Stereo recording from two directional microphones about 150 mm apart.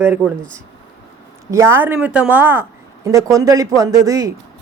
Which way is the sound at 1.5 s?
15° right (ahead or behind).